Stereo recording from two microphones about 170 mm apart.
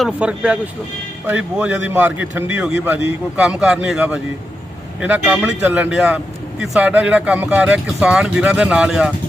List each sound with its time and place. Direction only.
0.0 s a man's voice: 5° right (ahead or behind)